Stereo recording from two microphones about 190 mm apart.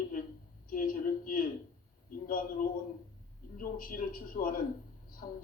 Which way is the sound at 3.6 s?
50° left (ahead or behind).